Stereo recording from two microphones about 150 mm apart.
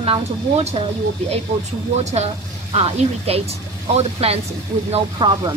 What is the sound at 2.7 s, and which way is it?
A woman's voice, 45° right (ahead or behind).